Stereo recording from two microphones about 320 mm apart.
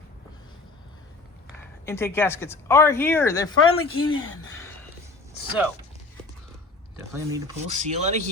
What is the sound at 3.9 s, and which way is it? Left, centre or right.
Speech, left.